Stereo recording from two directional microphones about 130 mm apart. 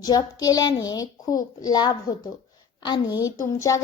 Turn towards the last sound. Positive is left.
turn(degrees=25)  # may be behind; listen again after turning